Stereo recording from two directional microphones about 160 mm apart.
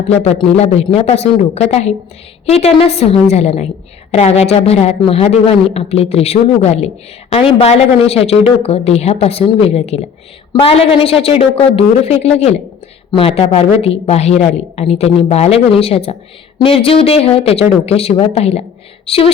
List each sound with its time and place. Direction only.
0.1 s a man's voice: 40° left (ahead or behind)